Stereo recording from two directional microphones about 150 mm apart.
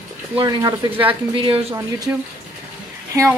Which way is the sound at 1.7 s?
20° right (ahead or behind).